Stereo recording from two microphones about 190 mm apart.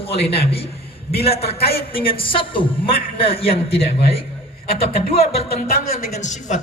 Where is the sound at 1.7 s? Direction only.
55° left (ahead or behind).